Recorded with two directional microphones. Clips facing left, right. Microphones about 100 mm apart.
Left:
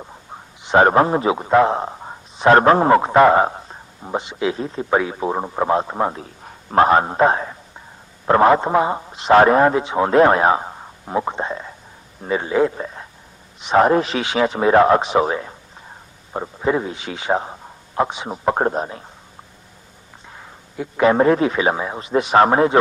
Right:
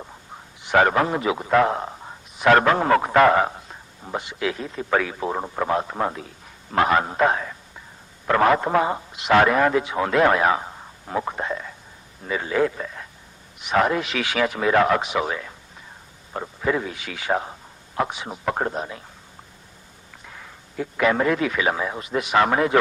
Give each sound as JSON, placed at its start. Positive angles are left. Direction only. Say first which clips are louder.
{"t": 0.6, "sound": "a sound", "louder": "left 4 dB", "side_deg": 25}
{"t": 0.9, "sound": "a man's voice", "louder": "left 6 dB", "side_deg": 30}
{"t": 6.2, "sound": "a man's voice", "louder": "left 5 dB", "side_deg": 40}
{"t": 20.2, "sound": "speech", "louder": "left 2 dB", "side_deg": 25}